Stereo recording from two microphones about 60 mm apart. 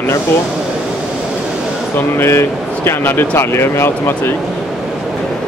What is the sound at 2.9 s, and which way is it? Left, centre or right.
Speech, left.